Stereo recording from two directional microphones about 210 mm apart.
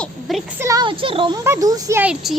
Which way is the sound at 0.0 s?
Centre (ahead or behind).